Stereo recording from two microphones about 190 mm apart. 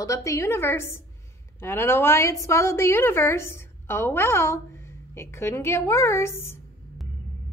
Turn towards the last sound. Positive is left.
turn(degrees=15)  # may be behind; listen again after turning